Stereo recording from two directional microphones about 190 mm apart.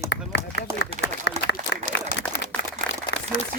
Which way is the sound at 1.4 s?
65° left (ahead or behind).